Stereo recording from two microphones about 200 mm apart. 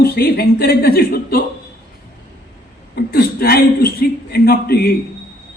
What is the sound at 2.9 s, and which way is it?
A man's voice, 50° left (ahead or behind).